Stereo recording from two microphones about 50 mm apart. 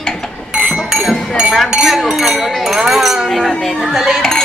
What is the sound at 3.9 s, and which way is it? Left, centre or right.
Speech, centre.